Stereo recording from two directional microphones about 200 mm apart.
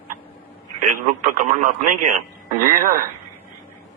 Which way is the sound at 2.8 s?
45° right (ahead or behind).